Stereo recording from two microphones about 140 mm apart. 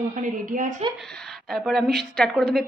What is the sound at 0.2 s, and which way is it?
Speech, 70° right (ahead or behind).